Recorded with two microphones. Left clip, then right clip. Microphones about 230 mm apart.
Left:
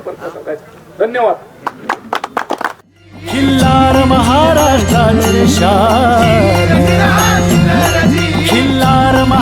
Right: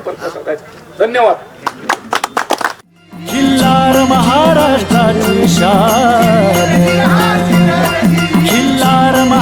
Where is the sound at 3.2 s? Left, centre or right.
Centre.